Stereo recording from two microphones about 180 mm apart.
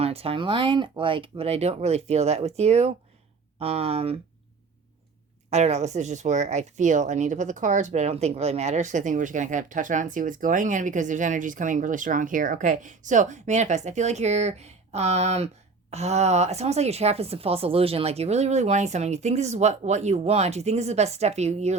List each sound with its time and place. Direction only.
0.0 s speech: 35° right (ahead or behind)
5.5 s speech: 40° right (ahead or behind)